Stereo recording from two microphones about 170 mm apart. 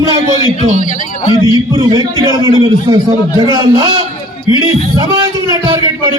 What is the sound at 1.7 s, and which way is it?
A man's voice, 20° right (ahead or behind).